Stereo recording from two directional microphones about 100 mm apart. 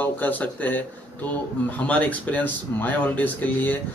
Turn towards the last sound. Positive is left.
turn(degrees=20)  # may be behind; listen again after turning